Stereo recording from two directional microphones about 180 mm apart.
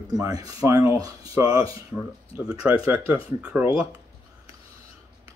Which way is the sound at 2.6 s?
10° right (ahead or behind).